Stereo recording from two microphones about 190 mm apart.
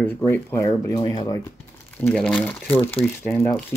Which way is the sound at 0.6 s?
25° left (ahead or behind).